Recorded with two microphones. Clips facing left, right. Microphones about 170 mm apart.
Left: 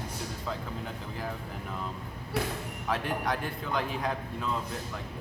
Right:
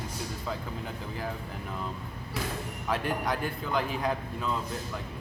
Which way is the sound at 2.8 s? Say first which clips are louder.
Right 1 dB; centre (ahead or behind).